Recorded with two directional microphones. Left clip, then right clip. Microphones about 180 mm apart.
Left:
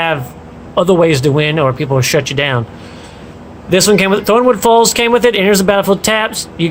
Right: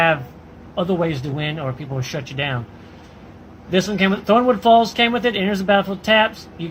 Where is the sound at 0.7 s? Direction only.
60° left (ahead or behind).